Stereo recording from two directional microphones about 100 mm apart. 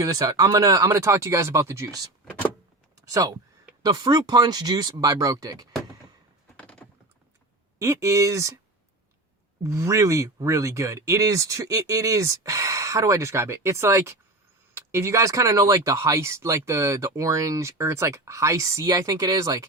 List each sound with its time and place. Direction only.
0.0 s speech: 35° right (ahead or behind)
2.9 s a sound: 35° right (ahead or behind)
3.8 s speech: 45° right (ahead or behind)
6.6 s typing: 10° left (ahead or behind)
7.8 s speech: 30° right (ahead or behind)
9.6 s speech: 30° right (ahead or behind)